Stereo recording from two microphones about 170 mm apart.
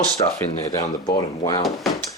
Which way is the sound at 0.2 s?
25° left (ahead or behind).